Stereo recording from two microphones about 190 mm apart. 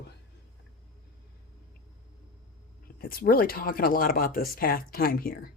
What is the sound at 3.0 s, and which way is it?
Speech, 50° left (ahead or behind).